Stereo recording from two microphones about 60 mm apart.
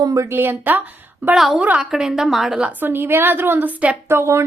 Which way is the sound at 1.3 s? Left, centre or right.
Centre.